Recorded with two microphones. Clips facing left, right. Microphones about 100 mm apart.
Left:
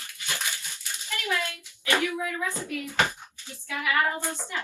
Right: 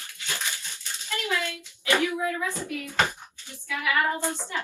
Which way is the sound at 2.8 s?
20° left (ahead or behind).